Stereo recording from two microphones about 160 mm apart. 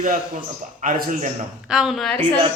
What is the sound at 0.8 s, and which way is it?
Speech, 60° right (ahead or behind).